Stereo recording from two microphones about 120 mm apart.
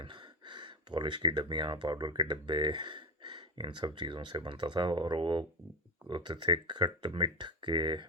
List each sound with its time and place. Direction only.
0.0 s speech: 40° right (ahead or behind)